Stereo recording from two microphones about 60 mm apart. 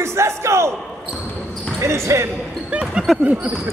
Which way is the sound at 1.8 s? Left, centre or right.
Right.